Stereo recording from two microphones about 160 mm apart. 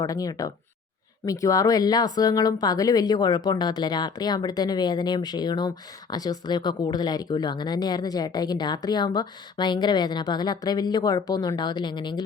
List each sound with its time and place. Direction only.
0.0 s speech: 20° left (ahead or behind)